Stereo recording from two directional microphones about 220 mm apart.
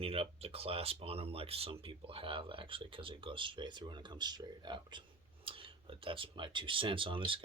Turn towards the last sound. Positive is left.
turn(degrees=-25)  # may be behind; listen again after turning